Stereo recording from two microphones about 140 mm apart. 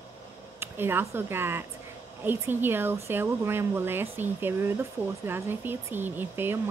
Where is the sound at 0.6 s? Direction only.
15° right (ahead or behind).